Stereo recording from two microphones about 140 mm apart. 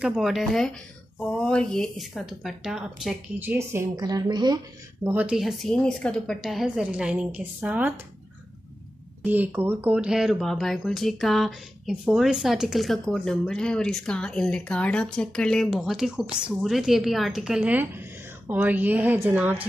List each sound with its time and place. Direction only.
0.0 s speech: centre (ahead or behind)
3.3 s a woman's voice: 15° right (ahead or behind); by 4.6 s 30° right (ahead or behind)
5.0 s speech: 10° right (ahead or behind)
9.2 s a woman's voice: 10° right (ahead or behind)